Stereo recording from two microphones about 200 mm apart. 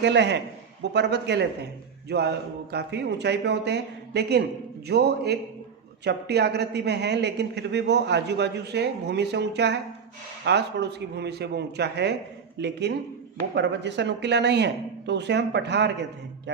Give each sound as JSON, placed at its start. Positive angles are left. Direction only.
{"t": 0.0, "sound": "a woman's voice", "side_deg": -60}